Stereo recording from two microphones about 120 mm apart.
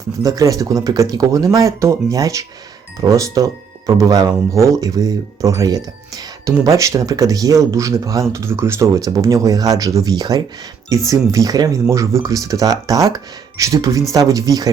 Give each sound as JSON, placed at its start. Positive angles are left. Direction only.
{"t": 0.2, "sound": "speech", "side_deg": -30}